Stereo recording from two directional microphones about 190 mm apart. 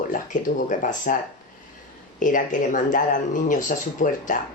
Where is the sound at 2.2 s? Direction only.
45° left (ahead or behind).